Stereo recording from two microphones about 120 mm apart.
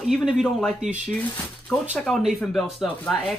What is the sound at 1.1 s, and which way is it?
Speech, 15° left (ahead or behind).